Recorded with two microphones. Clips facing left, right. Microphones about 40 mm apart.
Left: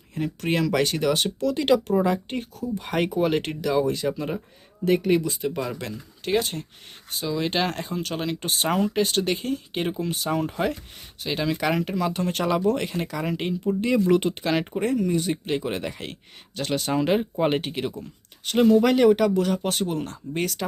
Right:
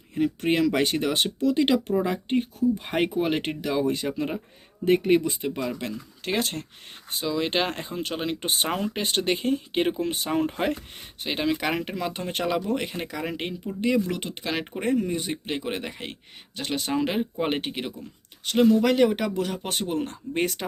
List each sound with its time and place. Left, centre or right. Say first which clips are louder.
0.1 s speech: right 2 dB; centre; by 5.5 s right
6.2 s speech: left 3 dB; right
8.7 s speech: left 4 dB; centre
9.0 s speech: left 2 dB; right; by 14.7 s centre
14.8 s speech: left 2 dB; centre
18.4 s speech: left 2 dB; centre
19.1 s speech: left 6 dB; centre
20.3 s speech: right 1 dB; right